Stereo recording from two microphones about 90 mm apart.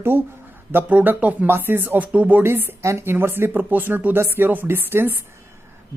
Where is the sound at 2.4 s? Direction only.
25° right (ahead or behind).